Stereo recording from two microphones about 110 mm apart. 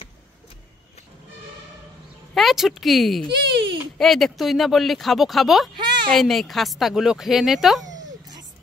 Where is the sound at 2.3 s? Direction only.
Centre (ahead or behind).